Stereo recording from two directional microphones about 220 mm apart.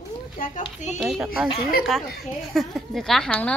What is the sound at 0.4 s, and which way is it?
Speech, 35° left (ahead or behind).